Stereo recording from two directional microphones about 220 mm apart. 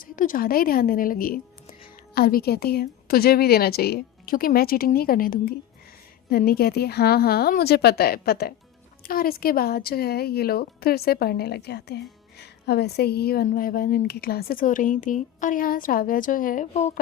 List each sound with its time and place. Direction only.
0.0 s speech: 40° left (ahead or behind)